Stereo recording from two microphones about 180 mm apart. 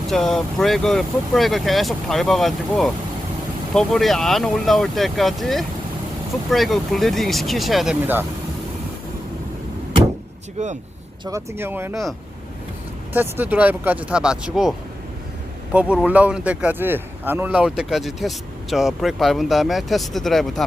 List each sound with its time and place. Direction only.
0.1 s speech: centre (ahead or behind)
10.6 s speech: 40° right (ahead or behind)
11.3 s speech: 15° right (ahead or behind)
13.1 s speech: 10° right (ahead or behind)